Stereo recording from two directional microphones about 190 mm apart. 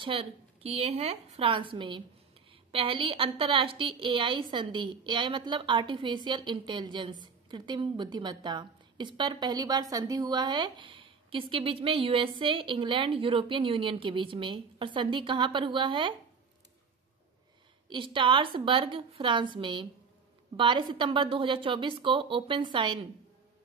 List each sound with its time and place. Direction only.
0.0 s a woman's voice: 30° right (ahead or behind)
17.8 s a woman's voice: 25° right (ahead or behind)